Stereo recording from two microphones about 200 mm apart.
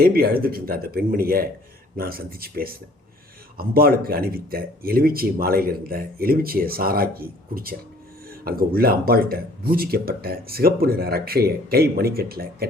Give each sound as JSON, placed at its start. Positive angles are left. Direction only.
{"t": 0.0, "sound": "speech", "side_deg": -50}